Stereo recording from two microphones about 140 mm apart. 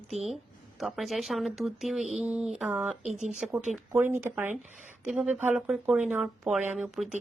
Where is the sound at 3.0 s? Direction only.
60° right (ahead or behind).